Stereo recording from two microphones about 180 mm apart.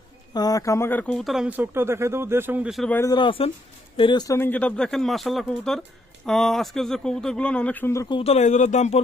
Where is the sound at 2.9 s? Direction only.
20° left (ahead or behind).